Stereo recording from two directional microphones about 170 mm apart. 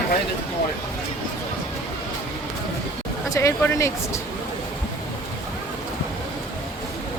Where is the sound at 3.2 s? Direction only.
15° left (ahead or behind).